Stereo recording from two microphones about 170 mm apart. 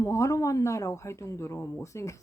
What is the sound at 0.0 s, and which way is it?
Speech, 20° left (ahead or behind).